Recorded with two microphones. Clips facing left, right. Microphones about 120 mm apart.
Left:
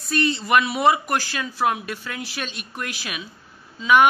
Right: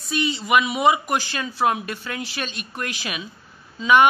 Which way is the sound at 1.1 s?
5° left (ahead or behind).